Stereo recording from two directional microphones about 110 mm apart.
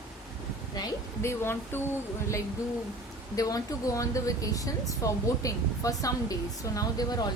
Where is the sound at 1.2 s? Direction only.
25° left (ahead or behind).